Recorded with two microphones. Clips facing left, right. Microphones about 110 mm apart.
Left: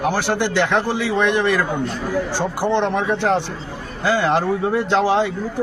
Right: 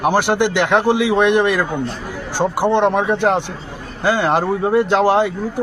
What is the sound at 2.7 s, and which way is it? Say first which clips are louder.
Speech: right 2 dB; 15° right (ahead or behind).